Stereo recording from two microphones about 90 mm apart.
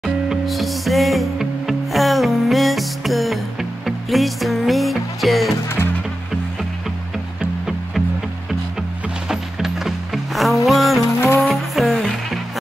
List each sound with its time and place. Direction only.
0.0 s music: centre (ahead or behind)
9.3 s music: 5° right (ahead or behind)
11.1 s music: 25° left (ahead or behind)
11.4 s music: centre (ahead or behind)